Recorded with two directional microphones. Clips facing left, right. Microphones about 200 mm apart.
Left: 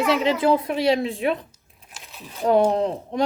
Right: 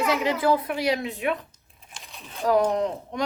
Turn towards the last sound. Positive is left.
turn(degrees=30)  # may be behind; listen again after turning